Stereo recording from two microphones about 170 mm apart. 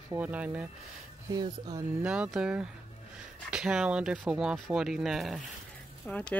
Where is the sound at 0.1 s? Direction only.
10° right (ahead or behind).